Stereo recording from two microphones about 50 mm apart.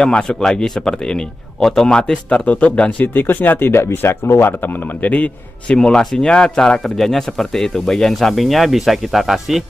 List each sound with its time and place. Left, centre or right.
0.0 s speech: centre
3.0 s speech: left
4.5 s a man's voice: left
5.8 s speech: centre